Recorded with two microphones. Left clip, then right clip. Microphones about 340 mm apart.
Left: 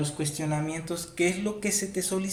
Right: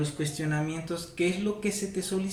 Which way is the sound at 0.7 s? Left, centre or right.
Centre.